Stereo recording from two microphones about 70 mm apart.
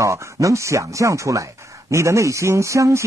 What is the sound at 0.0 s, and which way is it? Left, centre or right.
Speech, right.